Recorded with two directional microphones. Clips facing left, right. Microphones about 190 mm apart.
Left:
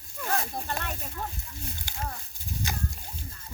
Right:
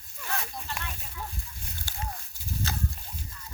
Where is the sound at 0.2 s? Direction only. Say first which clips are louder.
Left 5 dB; 50° left (ahead or behind).